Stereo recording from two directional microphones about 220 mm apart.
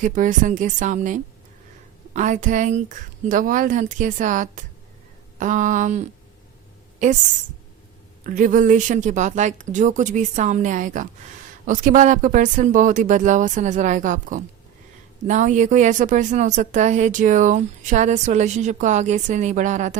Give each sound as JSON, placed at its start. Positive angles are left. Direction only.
{"t": 0.0, "sound": "a woman's voice", "side_deg": -35}
{"t": 8.2, "sound": "a woman's voice", "side_deg": -35}